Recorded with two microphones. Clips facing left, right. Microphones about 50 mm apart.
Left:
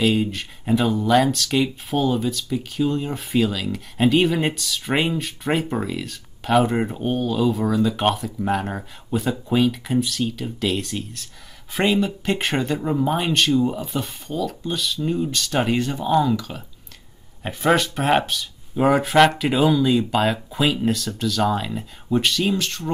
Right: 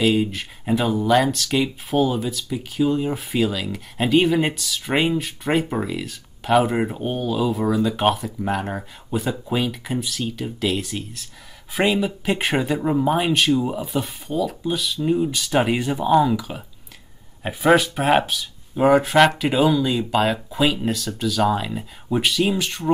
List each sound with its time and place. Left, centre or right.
0.0 s speech: centre